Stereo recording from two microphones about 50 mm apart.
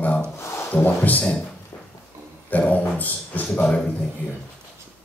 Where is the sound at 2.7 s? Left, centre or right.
Left.